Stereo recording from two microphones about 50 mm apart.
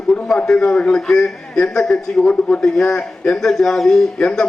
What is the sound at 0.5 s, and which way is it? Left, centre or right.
Speech, left.